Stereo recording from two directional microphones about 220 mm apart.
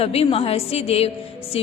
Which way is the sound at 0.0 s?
25° left (ahead or behind).